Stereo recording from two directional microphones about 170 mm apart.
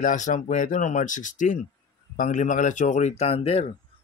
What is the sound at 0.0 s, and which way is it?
Speech, 50° left (ahead or behind).